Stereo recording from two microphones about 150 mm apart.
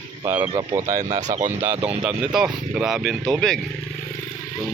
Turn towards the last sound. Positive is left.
turn(degrees=5)  # may be behind; listen again after turning